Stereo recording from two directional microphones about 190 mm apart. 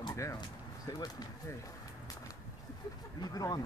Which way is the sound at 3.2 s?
20° left (ahead or behind).